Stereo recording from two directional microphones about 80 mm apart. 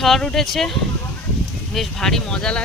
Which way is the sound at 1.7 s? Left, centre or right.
Centre.